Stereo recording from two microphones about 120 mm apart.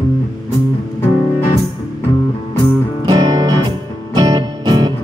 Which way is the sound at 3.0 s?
35° right (ahead or behind).